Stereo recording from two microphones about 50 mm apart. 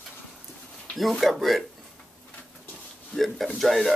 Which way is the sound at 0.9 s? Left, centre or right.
Centre.